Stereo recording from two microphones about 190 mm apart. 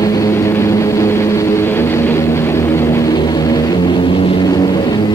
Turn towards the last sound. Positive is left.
turn(degrees=20)  # may be behind; listen again after turning